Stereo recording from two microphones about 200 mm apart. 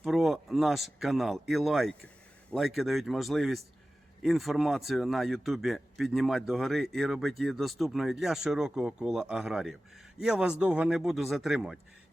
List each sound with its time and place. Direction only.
0.0 s speech: centre (ahead or behind)